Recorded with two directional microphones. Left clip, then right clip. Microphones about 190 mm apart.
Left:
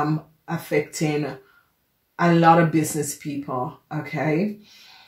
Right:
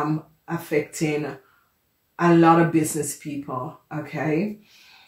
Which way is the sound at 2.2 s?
35° left (ahead or behind).